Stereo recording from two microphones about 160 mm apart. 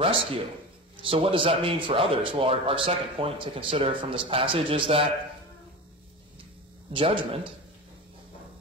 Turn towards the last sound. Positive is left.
turn(degrees=-35)  # may be behind; listen again after turning